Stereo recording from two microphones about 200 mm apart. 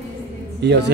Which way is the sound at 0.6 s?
60° right (ahead or behind).